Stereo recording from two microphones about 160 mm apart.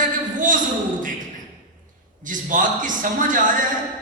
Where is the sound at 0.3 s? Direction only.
55° right (ahead or behind).